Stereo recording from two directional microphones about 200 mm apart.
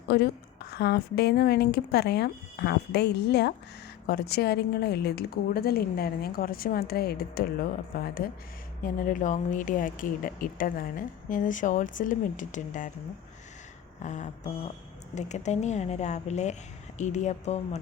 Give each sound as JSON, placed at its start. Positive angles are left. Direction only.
{"t": 0.1, "sound": "a woman's voice", "side_deg": 55}
{"t": 8.8, "sound": "speech", "side_deg": 45}
{"t": 14.0, "sound": "speech", "side_deg": 35}